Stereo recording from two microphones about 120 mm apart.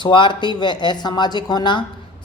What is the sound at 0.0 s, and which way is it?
Speech, 40° left (ahead or behind).